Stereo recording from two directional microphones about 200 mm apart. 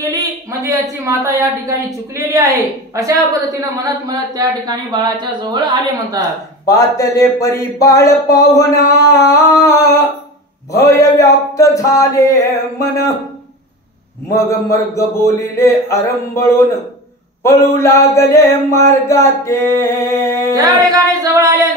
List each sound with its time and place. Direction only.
0.1 s a woman's voice: 15° right (ahead or behind)
6.6 s mantra: 15° left (ahead or behind)
14.3 s mantra: 15° left (ahead or behind)
20.5 s music: 15° right (ahead or behind)